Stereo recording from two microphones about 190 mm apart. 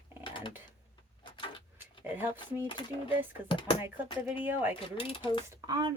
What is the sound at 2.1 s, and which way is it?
Speech, 10° right (ahead or behind).